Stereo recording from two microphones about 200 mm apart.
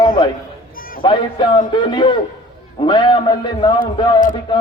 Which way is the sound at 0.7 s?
45° left (ahead or behind).